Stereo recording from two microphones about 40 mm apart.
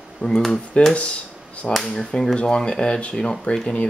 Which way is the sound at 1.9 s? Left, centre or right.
Centre.